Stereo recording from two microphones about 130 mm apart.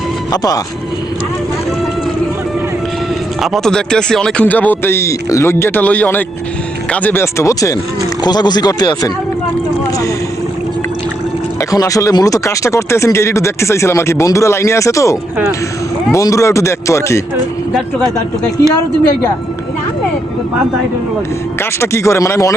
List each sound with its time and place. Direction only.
0.3 s speech: 30° left (ahead or behind)
3.4 s speech: centre (ahead or behind); by 9.1 s 30° left (ahead or behind)
11.7 s speech: 25° left (ahead or behind)
21.6 s speech: 20° left (ahead or behind)